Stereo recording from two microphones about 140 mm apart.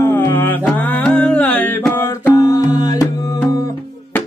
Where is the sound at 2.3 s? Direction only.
25° left (ahead or behind).